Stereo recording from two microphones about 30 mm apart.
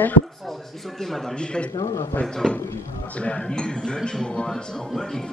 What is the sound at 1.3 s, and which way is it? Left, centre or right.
A man's voice, left.